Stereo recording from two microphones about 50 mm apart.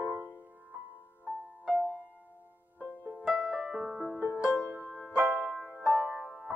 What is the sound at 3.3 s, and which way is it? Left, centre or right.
Music, centre.